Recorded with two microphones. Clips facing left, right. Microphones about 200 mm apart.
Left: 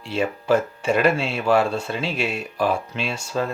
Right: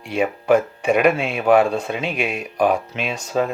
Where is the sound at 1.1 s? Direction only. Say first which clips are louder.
Right 4 dB; 55° right (ahead or behind).